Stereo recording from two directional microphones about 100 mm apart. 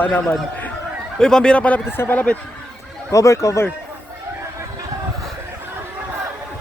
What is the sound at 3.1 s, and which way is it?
Speech, 35° left (ahead or behind).